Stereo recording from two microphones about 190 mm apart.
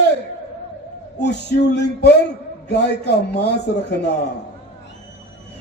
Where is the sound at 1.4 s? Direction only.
65° left (ahead or behind).